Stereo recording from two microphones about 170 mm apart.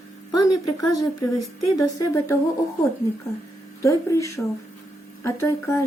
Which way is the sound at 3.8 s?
20° left (ahead or behind).